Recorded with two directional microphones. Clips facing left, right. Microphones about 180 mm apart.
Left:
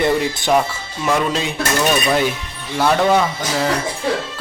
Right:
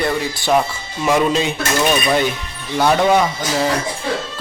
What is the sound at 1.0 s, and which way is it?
Speech, 10° right (ahead or behind).